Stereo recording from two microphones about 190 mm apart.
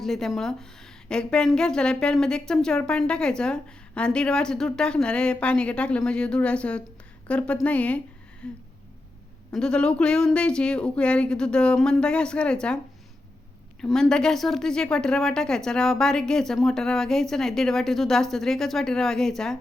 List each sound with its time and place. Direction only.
0.0 s a woman's voice: centre (ahead or behind)
13.8 s a woman's voice: 5° left (ahead or behind)